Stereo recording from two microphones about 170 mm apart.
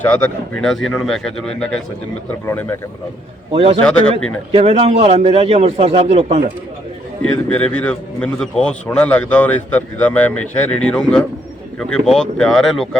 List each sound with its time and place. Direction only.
0.1 s a man's voice: 5° left (ahead or behind)
3.5 s a man's voice: 35° right (ahead or behind)
7.3 s a man's voice: 5° left (ahead or behind)